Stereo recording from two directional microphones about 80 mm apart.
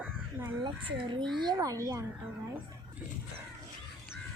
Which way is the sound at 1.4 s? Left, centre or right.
Right.